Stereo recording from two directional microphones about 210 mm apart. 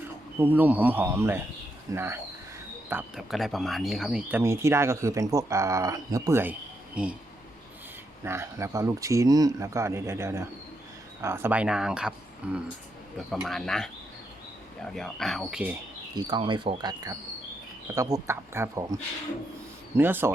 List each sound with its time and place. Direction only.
0.3 s speech: 10° right (ahead or behind)
2.9 s speech: centre (ahead or behind)
8.2 s speech: 15° right (ahead or behind)
16.1 s speech: 20° right (ahead or behind)
20.0 s speech: 10° right (ahead or behind)